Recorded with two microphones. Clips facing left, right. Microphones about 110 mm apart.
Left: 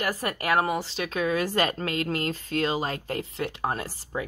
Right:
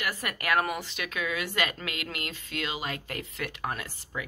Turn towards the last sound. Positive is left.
turn(degrees=30)  # may be behind; listen again after turning